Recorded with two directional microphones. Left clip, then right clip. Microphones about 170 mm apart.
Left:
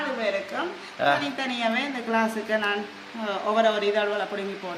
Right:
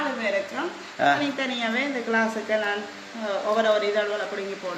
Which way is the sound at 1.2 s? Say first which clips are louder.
Even; 80° left.